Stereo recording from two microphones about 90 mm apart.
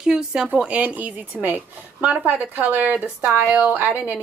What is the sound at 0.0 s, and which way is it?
A woman's voice, 5° right (ahead or behind).